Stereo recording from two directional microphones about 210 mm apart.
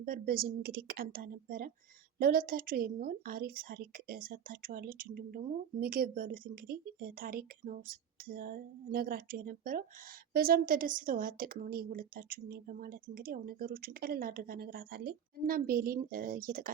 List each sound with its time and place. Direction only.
0.0 s a woman's voice: 45° right (ahead or behind)